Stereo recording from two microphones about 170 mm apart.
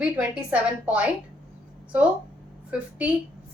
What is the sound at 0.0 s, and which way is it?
A woman's voice, 10° right (ahead or behind).